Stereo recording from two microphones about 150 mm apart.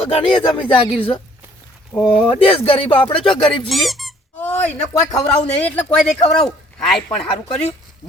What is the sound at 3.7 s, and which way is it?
Speech, centre (ahead or behind).